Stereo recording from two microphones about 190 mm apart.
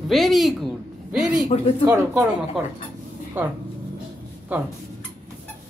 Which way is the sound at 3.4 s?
10° right (ahead or behind).